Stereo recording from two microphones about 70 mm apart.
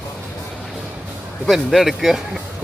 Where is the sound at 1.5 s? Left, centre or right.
Centre.